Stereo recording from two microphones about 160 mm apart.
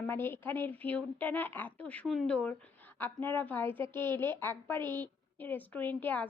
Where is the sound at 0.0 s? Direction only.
15° left (ahead or behind).